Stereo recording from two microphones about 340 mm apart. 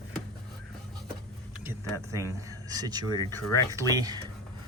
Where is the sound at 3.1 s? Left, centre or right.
Centre.